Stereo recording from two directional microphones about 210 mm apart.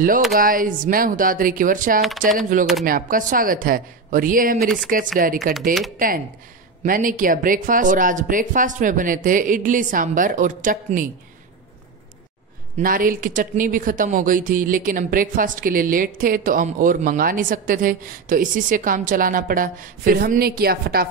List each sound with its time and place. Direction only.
0.3 s speech: 40° right (ahead or behind)
2.0 s speech: centre (ahead or behind)
2.8 s speech: 40° right (ahead or behind)
4.6 s speech: centre (ahead or behind)
5.2 s speech: 40° right (ahead or behind)
12.8 s speech: 40° right (ahead or behind)